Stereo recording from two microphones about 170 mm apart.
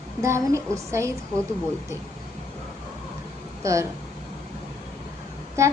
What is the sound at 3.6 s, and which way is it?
Speech, 15° right (ahead or behind).